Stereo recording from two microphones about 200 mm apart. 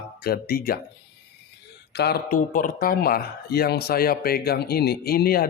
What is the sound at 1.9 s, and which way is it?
A man's voice, 55° left (ahead or behind).